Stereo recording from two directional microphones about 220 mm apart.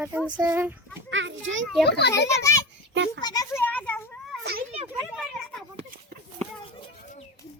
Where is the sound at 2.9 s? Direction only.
55° right (ahead or behind).